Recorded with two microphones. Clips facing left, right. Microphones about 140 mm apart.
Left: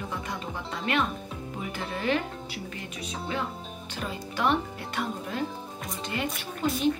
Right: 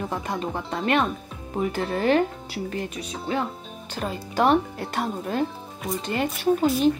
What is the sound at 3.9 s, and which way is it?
Speech, 40° right (ahead or behind).